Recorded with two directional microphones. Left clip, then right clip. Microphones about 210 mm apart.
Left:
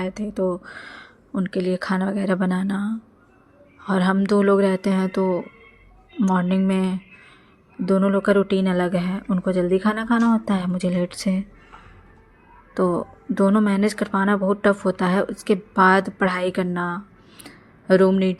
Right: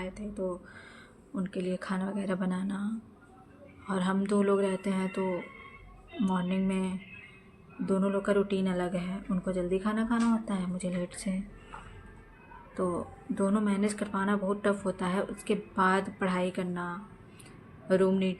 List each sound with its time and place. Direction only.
0.0 s speech: 45° left (ahead or behind)
12.7 s speech: 45° left (ahead or behind)